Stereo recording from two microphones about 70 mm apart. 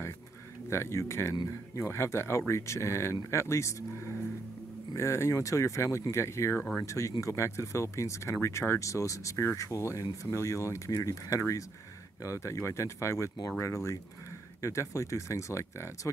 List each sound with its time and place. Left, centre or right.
0.7 s speech: left
4.9 s speech: left